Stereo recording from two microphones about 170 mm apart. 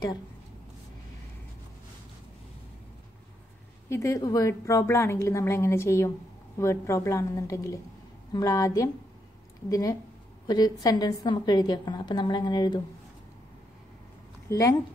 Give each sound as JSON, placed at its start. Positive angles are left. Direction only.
{"t": 3.9, "sound": "a woman's voice", "side_deg": 20}
{"t": 14.5, "sound": "a woman's voice", "side_deg": 20}